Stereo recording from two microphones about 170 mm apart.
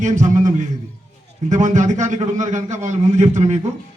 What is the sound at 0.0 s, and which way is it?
A man's voice, 45° right (ahead or behind).